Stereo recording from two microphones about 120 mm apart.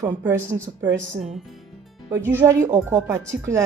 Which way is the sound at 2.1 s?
20° right (ahead or behind).